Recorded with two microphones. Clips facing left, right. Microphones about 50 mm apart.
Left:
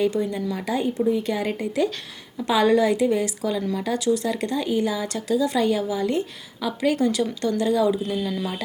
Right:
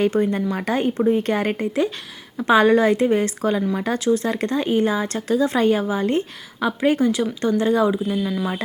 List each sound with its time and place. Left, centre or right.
0.0 s speech: right
8.1 s speech: centre